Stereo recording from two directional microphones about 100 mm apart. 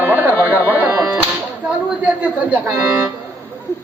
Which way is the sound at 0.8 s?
20° right (ahead or behind).